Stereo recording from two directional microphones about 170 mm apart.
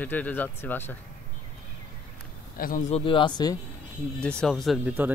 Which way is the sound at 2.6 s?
50° left (ahead or behind).